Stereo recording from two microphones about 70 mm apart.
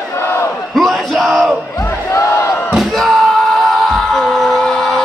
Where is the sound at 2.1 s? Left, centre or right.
Left.